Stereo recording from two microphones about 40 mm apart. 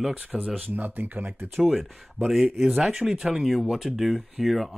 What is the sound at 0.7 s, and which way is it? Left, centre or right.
Speech, right.